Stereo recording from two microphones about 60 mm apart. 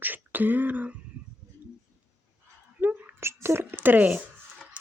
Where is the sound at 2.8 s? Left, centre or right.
Right.